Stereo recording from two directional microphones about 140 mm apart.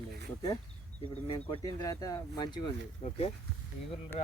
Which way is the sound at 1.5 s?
30° left (ahead or behind).